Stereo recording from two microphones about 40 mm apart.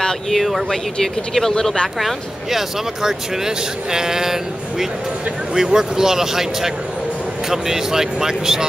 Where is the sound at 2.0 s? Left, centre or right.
Centre.